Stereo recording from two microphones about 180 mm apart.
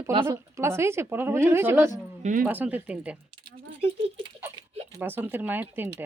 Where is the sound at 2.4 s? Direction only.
10° right (ahead or behind).